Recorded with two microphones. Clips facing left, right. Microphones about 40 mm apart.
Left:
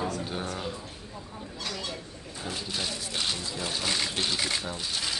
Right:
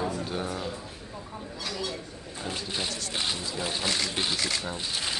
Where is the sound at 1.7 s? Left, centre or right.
Centre.